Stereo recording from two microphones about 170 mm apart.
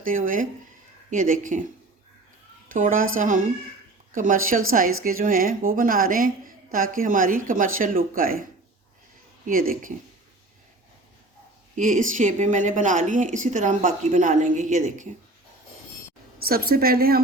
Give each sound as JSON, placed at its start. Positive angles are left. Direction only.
{"t": 0.0, "sound": "a woman's voice", "side_deg": -55}
{"t": 2.6, "sound": "a woman's voice", "side_deg": -50}
{"t": 9.5, "sound": "speech", "side_deg": -55}
{"t": 11.8, "sound": "a woman's voice", "side_deg": -50}
{"t": 16.4, "sound": "speech", "side_deg": -60}